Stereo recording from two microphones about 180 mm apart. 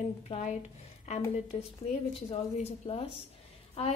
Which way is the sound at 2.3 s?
35° left (ahead or behind).